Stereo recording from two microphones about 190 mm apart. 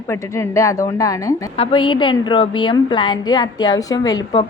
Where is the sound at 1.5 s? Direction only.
30° left (ahead or behind).